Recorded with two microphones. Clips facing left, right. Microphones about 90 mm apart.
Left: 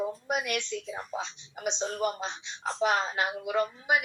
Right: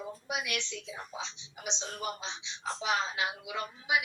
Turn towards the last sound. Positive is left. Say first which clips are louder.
# left 5 dB
turn(degrees=50)  # may be behind; listen again after turning